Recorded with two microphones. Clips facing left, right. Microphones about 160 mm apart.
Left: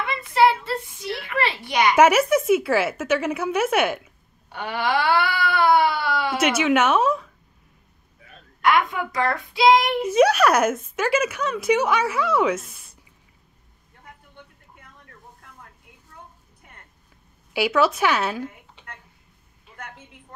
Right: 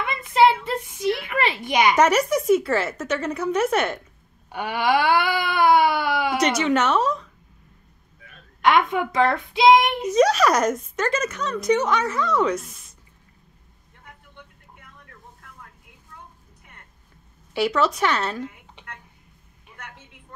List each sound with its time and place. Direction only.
0.0 s a sound: 20° right (ahead or behind)
2.0 s a woman's voice: 5° left (ahead or behind)
4.5 s a sound: 15° right (ahead or behind)
6.4 s a woman's voice: 5° left (ahead or behind)
8.6 s a woman's voice: 25° right (ahead or behind)
10.1 s a woman's voice: 5° left (ahead or behind)
17.6 s a woman's voice: 5° left (ahead or behind)